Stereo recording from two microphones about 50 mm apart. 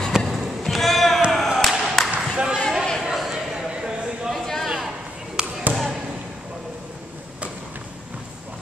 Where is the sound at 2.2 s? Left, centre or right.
Centre.